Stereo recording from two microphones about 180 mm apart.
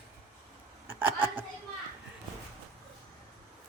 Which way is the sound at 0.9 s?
10° right (ahead or behind).